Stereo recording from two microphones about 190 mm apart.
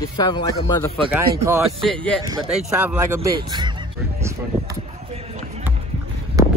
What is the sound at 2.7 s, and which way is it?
Speech, 10° right (ahead or behind).